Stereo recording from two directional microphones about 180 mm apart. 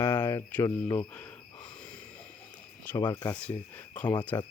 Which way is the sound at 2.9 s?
25° left (ahead or behind).